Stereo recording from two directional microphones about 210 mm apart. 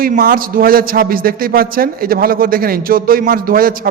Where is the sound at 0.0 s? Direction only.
45° right (ahead or behind).